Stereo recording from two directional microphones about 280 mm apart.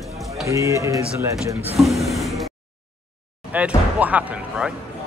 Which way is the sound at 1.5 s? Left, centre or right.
Right.